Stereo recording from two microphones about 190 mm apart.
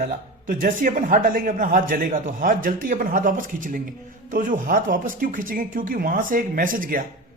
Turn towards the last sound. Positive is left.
turn(degrees=-45)  # may be behind; listen again after turning